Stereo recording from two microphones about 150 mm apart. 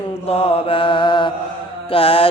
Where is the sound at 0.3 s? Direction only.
40° left (ahead or behind).